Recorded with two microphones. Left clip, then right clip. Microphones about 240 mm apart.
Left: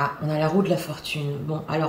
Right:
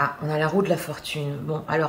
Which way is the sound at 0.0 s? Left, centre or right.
Centre.